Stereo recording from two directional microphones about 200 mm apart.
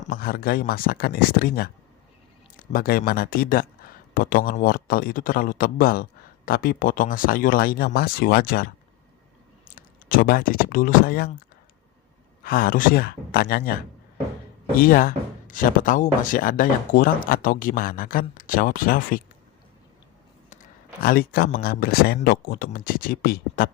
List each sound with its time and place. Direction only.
0.0 s speech: 50° left (ahead or behind)
12.4 s speech: 45° left (ahead or behind)
14.8 s speech: 45° left (ahead or behind)
20.5 s speech: 45° left (ahead or behind)